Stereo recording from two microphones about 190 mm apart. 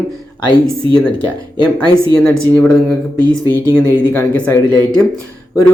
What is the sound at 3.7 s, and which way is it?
Speech, 15° left (ahead or behind).